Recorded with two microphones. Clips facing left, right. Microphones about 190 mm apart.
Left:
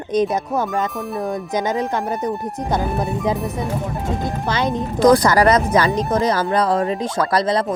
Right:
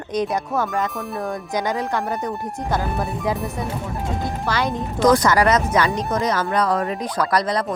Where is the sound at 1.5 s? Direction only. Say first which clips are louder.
Left 2 dB; 20° left (ahead or behind).